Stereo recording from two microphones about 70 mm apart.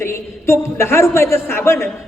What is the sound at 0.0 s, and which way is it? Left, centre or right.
A man's voice, left.